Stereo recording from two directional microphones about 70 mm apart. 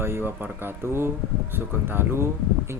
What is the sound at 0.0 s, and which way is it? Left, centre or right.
Speech, right.